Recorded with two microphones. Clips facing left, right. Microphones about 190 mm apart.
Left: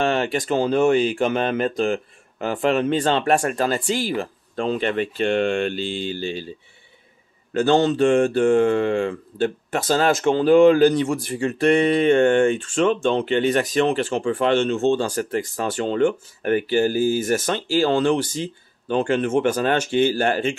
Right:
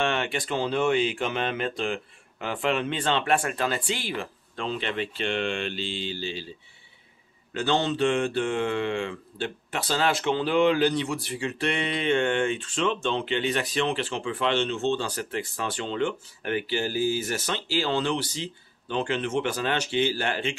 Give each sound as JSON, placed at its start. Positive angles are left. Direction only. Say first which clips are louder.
{"t": 0.0, "sound": "speech", "louder": "left 6 dB", "side_deg": 40}
{"t": 7.5, "sound": "speech", "louder": "left 8 dB", "side_deg": 45}